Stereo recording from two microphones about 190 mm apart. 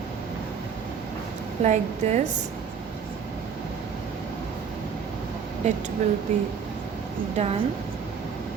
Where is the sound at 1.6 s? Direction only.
35° right (ahead or behind).